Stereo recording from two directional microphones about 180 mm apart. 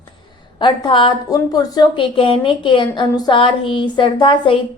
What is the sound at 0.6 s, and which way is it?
A woman's voice, 25° left (ahead or behind).